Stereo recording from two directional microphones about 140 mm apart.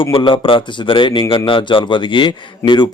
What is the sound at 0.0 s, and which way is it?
A man's voice, 35° left (ahead or behind).